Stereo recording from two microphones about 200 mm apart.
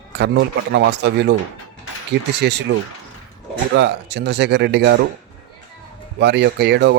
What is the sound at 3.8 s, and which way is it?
Speech, 55° right (ahead or behind).